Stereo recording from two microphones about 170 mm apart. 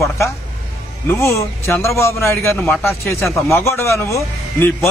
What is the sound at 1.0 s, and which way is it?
A man's voice, 15° left (ahead or behind).